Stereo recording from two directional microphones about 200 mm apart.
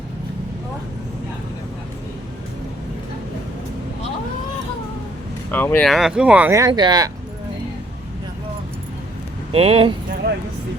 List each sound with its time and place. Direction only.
5.5 s speech: 10° left (ahead or behind); by 7.1 s 20° right (ahead or behind)
9.5 s speech: 30° right (ahead or behind)